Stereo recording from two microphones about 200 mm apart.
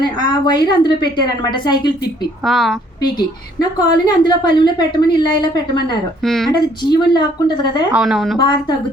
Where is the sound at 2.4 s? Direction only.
Centre (ahead or behind).